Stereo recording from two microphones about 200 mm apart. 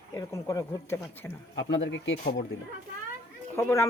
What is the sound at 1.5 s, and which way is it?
Speech, 60° left (ahead or behind).